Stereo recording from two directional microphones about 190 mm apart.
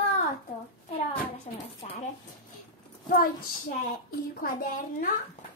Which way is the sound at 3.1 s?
45° left (ahead or behind).